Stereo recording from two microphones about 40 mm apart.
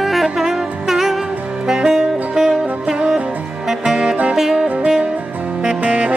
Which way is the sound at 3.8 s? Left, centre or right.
Centre.